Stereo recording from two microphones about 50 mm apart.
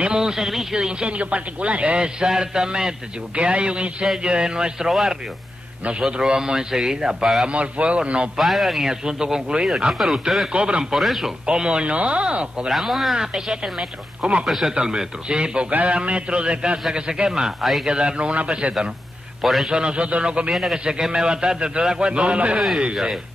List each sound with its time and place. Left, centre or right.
0.0 s a man's voice: centre
1.1 s speech: right
2.0 s a man's voice: centre
8.4 s speech: centre
9.0 s a man's voice: centre
10.5 s speech: centre
11.0 s speech: centre
11.4 s speech: centre
12.6 s a man's voice: centre
14.7 s a man's voice: centre
17.6 s speech: centre
17.8 s speech: centre
19.4 s speech: centre
19.7 s a man's voice: centre